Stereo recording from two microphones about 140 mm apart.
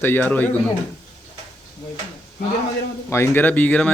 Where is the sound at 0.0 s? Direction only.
15° left (ahead or behind).